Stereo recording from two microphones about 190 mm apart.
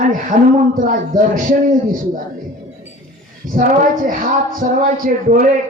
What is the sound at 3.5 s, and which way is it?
Speech, 45° right (ahead or behind).